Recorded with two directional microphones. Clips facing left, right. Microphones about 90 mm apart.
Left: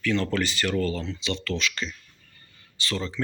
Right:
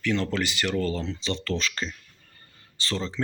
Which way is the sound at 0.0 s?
15° right (ahead or behind).